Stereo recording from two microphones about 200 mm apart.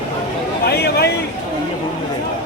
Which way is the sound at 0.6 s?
55° left (ahead or behind).